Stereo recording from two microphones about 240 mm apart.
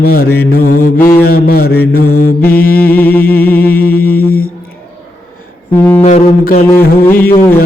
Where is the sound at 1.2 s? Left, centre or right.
Left.